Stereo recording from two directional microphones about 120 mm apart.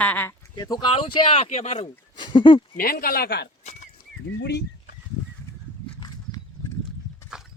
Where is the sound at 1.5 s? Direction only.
65° left (ahead or behind).